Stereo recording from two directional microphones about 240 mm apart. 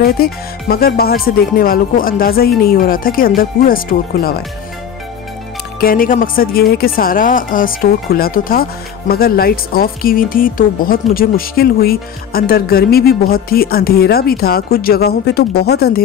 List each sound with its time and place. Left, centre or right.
0.0 s a woman's voice: left
5.8 s a woman's voice: left